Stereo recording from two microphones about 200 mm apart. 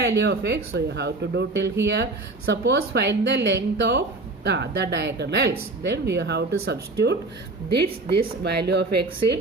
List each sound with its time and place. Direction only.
0.0 s speech: 60° right (ahead or behind)